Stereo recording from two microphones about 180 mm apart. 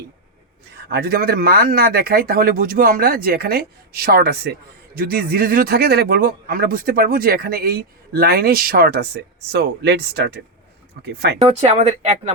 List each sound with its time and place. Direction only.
0.7 s speech: 65° right (ahead or behind)
11.3 s speech: 35° right (ahead or behind)